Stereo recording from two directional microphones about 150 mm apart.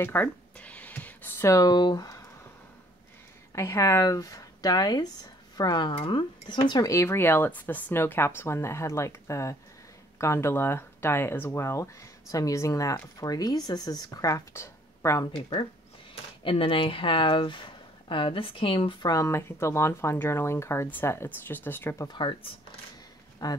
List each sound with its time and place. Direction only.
0.0 s a sound: 10° left (ahead or behind)
3.5 s speech: 20° left (ahead or behind)
16.4 s speech: 35° left (ahead or behind); by 22.0 s 15° left (ahead or behind)
22.0 s speech: 35° left (ahead or behind)